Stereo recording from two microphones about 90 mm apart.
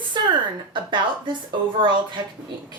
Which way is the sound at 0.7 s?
60° right (ahead or behind).